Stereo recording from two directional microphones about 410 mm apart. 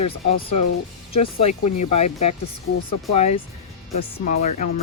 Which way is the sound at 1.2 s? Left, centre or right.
Centre.